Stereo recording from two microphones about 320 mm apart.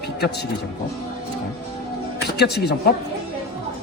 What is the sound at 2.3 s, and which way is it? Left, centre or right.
Speech, left.